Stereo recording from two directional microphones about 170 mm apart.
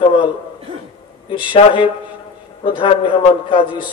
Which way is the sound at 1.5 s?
30° left (ahead or behind).